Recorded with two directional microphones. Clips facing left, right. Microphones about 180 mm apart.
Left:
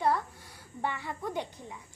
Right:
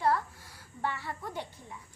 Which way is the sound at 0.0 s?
20° left (ahead or behind).